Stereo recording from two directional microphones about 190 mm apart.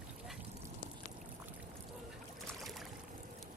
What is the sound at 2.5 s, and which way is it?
Boat, centre (ahead or behind).